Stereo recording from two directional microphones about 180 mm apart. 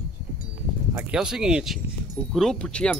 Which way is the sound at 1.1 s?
5° right (ahead or behind).